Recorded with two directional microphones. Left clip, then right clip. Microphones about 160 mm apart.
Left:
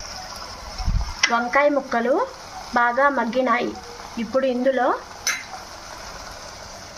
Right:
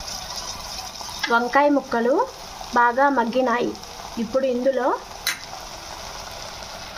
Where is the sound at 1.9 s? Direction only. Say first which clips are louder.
Even; 20° right (ahead or behind).